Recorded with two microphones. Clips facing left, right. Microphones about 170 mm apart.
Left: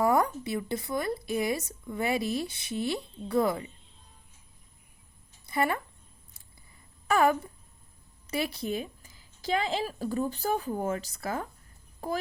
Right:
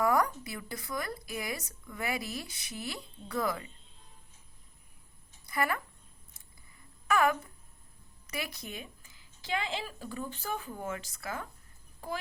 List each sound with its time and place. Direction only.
0.0 s speech: 25° left (ahead or behind)
5.5 s speech: 25° left (ahead or behind)
7.1 s speech: 30° left (ahead or behind)